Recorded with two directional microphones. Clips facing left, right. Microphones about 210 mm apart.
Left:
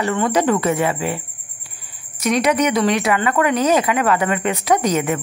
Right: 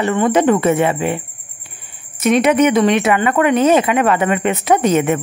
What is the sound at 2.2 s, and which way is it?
Speech, 25° right (ahead or behind).